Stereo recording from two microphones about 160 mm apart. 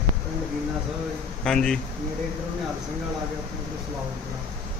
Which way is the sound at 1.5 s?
5° left (ahead or behind).